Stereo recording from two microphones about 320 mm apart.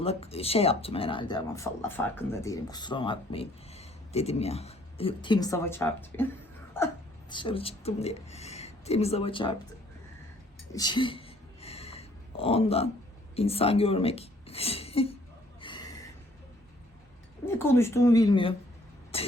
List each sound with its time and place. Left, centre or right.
0.0 s speech: centre
10.7 s a sound: centre
13.3 s speech: centre
15.6 s gasp: centre
17.4 s speech: centre